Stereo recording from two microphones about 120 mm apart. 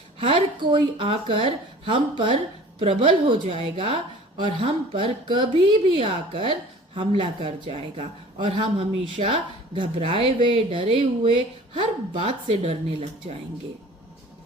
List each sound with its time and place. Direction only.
0.2 s a woman's voice: 45° right (ahead or behind)